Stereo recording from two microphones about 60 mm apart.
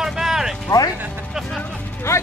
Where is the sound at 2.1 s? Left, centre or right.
Left.